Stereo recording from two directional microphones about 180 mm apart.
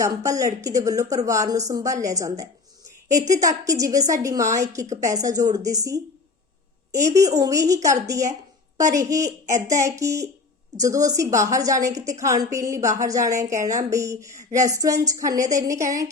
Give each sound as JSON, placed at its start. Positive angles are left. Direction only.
{"t": 0.0, "sound": "a woman's voice", "side_deg": -15}